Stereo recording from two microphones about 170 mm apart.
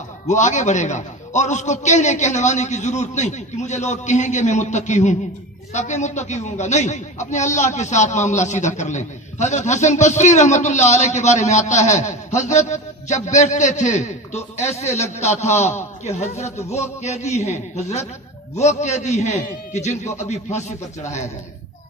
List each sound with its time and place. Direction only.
0.3 s a man's voice: 45° left (ahead or behind)